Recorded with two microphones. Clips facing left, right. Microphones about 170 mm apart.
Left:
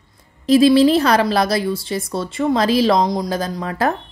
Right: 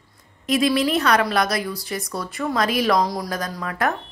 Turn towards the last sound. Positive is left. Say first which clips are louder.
# left 4 dB
turn(degrees=30)  # may be behind; listen again after turning